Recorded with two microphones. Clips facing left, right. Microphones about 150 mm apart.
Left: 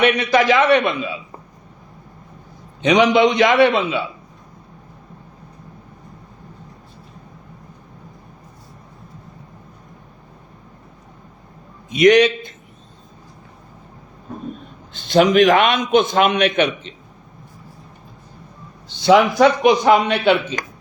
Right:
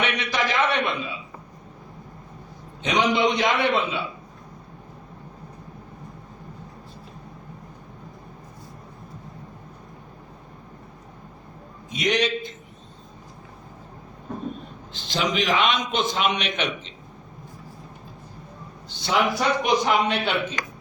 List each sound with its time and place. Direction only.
0.0 s a man's voice: 60° left (ahead or behind); by 0.8 s 85° left
2.8 s a man's voice: 75° left (ahead or behind)
11.9 s a man's voice: 70° left (ahead or behind)
14.9 s a man's voice: 55° left (ahead or behind)
19.0 s a man's voice: 90° left